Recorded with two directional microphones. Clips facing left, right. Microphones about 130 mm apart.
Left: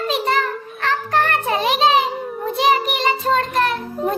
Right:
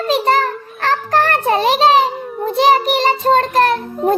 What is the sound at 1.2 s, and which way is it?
Child singing, 35° right (ahead or behind).